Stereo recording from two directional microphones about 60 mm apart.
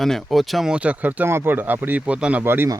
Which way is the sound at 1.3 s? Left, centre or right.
Right.